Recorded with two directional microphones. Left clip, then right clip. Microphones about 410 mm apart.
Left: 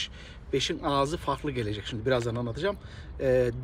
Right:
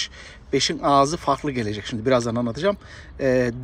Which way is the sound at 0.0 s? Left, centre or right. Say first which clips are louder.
Right 6 dB; centre.